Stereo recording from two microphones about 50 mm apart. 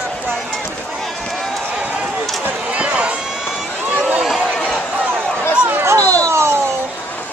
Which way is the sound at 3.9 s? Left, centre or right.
Right.